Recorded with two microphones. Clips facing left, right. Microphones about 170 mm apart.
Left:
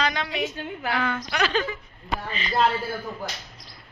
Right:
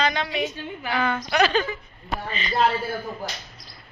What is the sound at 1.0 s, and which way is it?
Speech, 35° right (ahead or behind).